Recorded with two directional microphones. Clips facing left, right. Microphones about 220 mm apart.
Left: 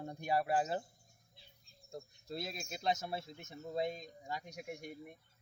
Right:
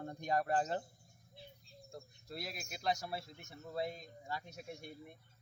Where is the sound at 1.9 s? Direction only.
25° left (ahead or behind).